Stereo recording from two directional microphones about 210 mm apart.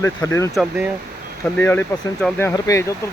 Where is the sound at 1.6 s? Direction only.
10° left (ahead or behind).